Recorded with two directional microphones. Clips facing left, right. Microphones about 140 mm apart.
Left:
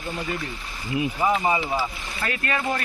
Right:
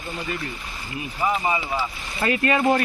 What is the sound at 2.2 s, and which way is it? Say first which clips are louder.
Speech: right 7 dB; 25° right (ahead or behind).